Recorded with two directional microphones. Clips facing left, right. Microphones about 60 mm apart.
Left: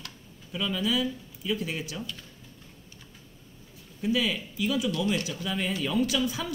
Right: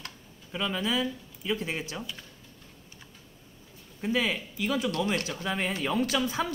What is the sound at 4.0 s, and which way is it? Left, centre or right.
Speech, right.